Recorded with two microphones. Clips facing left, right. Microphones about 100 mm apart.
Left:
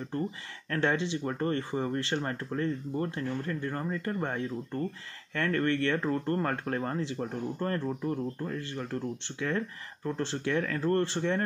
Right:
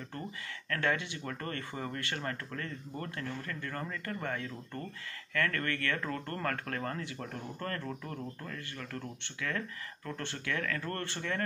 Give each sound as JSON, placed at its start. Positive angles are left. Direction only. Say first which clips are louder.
{"t": 0.7, "sound": "speech", "louder": "left 4 dB", "side_deg": 25}